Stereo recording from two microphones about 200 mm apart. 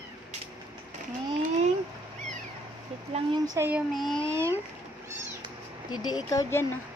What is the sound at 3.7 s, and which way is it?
Speech, 5° right (ahead or behind).